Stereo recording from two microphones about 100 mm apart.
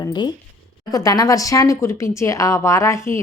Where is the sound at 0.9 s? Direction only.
35° left (ahead or behind).